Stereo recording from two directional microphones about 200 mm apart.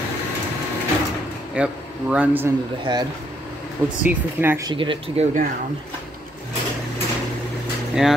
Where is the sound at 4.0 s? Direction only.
10° right (ahead or behind).